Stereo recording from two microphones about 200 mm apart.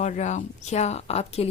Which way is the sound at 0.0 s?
35° left (ahead or behind).